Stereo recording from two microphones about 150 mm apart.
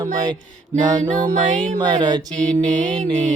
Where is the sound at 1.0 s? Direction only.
55° right (ahead or behind).